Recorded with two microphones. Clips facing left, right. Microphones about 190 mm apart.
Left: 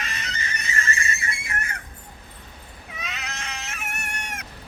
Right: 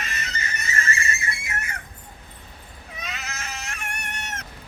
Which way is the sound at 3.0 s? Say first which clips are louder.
Even; centre (ahead or behind).